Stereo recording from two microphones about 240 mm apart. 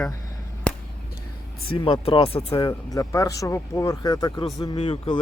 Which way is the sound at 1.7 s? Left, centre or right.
Left.